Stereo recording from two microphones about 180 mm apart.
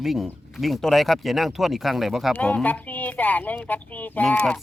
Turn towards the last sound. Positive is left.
turn(degrees=5)  # may be behind; listen again after turning